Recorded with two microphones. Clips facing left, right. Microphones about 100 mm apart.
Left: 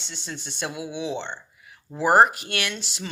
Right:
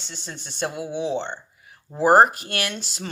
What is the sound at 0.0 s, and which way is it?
Speech, 45° right (ahead or behind).